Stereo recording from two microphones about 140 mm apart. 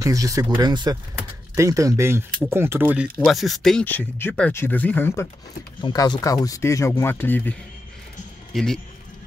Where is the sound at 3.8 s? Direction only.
10° left (ahead or behind).